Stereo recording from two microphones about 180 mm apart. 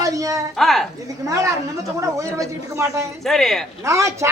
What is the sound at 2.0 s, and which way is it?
A woman's voice, 15° right (ahead or behind).